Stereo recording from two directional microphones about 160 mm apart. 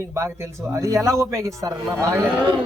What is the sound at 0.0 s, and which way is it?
Speech, 15° right (ahead or behind).